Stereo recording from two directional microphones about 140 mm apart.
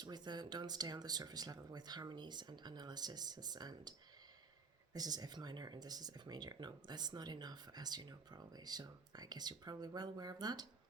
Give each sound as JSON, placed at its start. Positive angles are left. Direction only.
{"t": 0.0, "sound": "speech", "side_deg": -30}
{"t": 4.9, "sound": "speech", "side_deg": -30}